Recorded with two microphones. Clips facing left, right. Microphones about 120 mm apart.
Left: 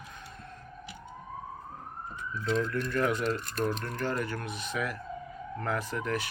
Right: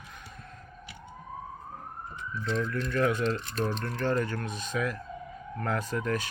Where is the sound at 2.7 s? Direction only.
15° left (ahead or behind).